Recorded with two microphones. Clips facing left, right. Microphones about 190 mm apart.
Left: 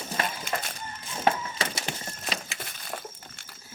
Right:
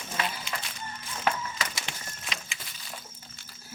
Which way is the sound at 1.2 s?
30° left (ahead or behind).